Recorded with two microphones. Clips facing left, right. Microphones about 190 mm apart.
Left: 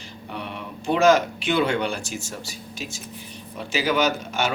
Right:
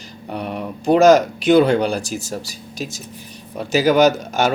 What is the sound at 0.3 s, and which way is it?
Speech, 40° right (ahead or behind).